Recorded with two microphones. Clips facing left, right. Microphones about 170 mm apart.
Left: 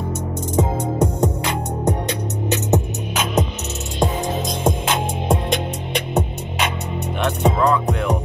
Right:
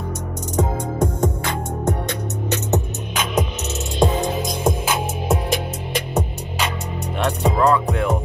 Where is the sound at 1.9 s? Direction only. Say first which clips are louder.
Left 2 dB; 20° left (ahead or behind).